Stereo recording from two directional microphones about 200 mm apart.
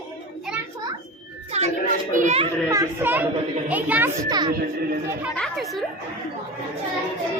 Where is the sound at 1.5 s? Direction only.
30° right (ahead or behind).